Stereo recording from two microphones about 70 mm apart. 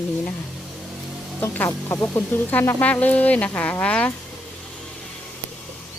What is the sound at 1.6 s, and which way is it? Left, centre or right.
Speech, left.